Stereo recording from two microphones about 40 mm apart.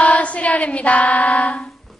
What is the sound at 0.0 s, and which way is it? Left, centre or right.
Female singing, left.